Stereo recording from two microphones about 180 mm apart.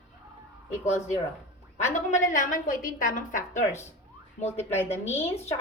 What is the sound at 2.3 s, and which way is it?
A woman's voice, 45° left (ahead or behind).